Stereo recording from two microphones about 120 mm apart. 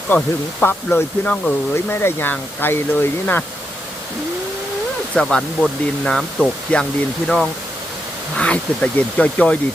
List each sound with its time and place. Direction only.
0.1 s speech: 20° left (ahead or behind)
5.1 s speech: 5° left (ahead or behind)